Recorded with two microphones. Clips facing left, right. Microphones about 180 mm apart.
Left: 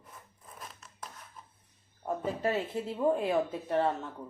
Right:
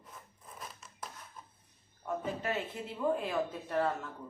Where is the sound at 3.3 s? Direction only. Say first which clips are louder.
Left 5 dB; 25° left (ahead or behind).